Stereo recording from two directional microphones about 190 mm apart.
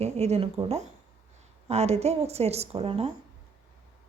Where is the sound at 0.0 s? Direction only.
35° right (ahead or behind).